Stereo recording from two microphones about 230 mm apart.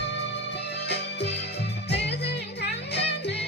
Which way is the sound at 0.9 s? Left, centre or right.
Left.